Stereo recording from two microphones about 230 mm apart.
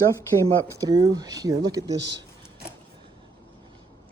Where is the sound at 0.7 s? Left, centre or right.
Centre.